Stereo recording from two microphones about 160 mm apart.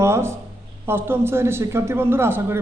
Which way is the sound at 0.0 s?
15° right (ahead or behind).